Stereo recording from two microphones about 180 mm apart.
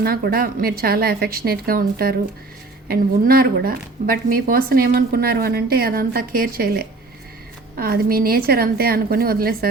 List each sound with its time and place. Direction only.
0.0 s speech: 55° right (ahead or behind)